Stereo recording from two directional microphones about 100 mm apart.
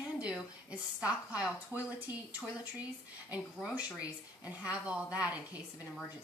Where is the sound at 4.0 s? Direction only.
15° right (ahead or behind).